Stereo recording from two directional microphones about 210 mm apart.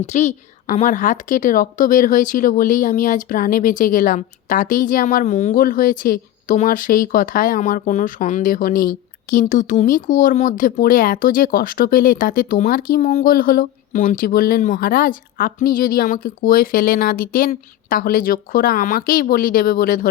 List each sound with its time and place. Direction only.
0.0 s a woman's voice: 35° left (ahead or behind)